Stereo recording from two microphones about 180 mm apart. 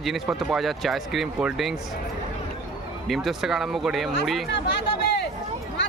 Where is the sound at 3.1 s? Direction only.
Centre (ahead or behind).